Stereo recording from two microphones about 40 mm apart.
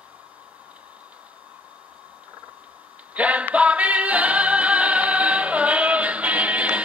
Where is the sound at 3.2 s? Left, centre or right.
Right.